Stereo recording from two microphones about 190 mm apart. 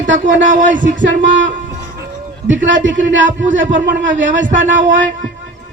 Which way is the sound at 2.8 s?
75° right (ahead or behind).